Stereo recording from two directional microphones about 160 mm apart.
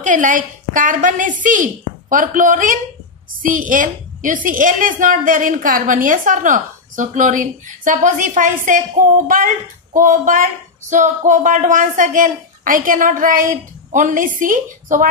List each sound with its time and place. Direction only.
0.0 s a woman's voice: 55° right (ahead or behind)